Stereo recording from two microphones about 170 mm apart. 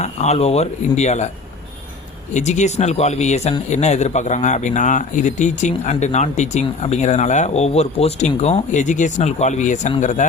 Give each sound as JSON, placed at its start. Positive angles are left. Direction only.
{"t": 0.0, "sound": "speech", "side_deg": 40}
{"t": 2.3, "sound": "speech", "side_deg": 45}